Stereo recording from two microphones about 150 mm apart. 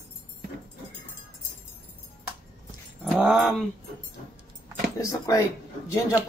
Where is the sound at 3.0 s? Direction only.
5° right (ahead or behind).